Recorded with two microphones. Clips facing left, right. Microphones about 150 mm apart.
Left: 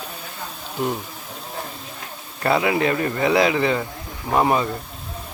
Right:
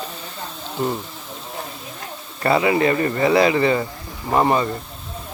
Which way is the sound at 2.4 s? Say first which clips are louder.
Right 2 dB; centre (ahead or behind).